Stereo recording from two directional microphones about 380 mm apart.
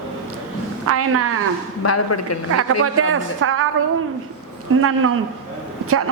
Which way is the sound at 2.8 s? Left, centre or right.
Right.